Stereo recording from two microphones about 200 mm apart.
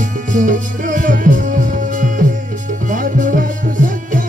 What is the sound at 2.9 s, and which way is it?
Music, 40° right (ahead or behind).